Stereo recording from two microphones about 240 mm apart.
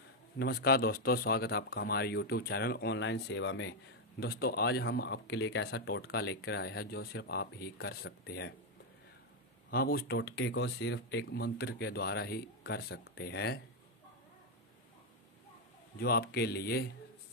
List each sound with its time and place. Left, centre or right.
0.4 s speech: left
9.7 s speech: left
16.0 s speech: left